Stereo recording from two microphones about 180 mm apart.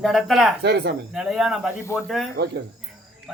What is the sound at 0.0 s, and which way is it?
Speech, centre (ahead or behind).